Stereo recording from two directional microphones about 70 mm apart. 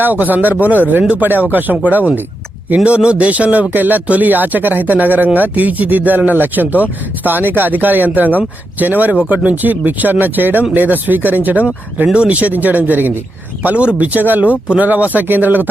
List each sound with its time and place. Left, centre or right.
0.0 s speech: right
12.0 s speech: centre